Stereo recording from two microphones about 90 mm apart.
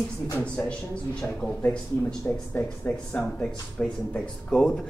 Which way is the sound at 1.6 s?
15° left (ahead or behind).